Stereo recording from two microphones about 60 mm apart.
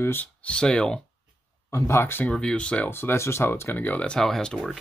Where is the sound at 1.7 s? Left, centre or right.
Left.